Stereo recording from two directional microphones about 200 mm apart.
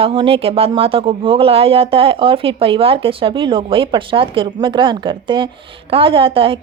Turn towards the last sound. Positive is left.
turn(degrees=-25)  # may be behind; listen again after turning